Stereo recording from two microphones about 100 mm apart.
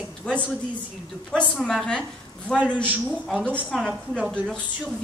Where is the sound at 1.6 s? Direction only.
5° left (ahead or behind).